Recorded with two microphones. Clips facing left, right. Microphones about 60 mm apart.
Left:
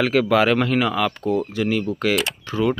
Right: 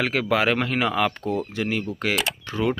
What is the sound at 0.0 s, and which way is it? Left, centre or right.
Speech, centre.